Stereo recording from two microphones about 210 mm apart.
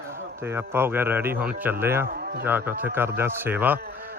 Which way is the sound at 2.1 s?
45° right (ahead or behind).